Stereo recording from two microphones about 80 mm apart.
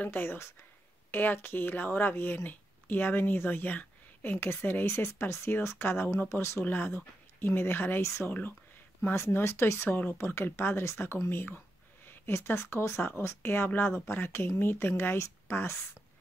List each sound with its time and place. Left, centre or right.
0.0 s speech: left